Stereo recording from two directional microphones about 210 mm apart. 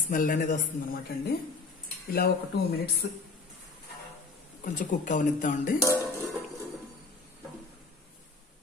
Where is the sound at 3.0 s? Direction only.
50° left (ahead or behind).